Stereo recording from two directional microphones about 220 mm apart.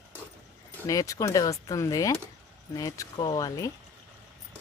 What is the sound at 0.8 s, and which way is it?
Speech, 15° left (ahead or behind).